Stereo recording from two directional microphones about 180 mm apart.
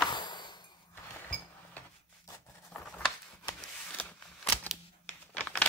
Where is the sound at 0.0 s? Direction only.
25° left (ahead or behind).